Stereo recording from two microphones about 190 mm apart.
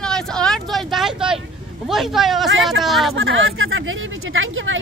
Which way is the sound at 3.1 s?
90° right.